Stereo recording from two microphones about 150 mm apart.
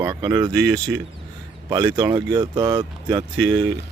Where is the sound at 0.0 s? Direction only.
25° right (ahead or behind).